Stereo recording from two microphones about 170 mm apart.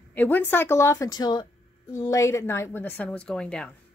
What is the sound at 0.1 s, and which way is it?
Speech, 10° left (ahead or behind).